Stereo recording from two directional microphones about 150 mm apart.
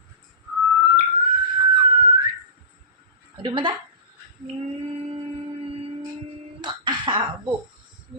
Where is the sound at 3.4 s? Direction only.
30° right (ahead or behind).